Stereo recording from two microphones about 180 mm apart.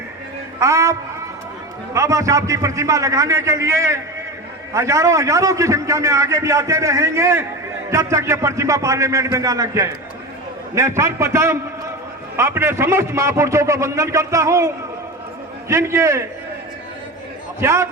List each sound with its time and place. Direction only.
0.6 s a man's voice: 15° right (ahead or behind)
15.7 s a man's voice: 15° right (ahead or behind)
17.6 s a man's voice: 15° right (ahead or behind)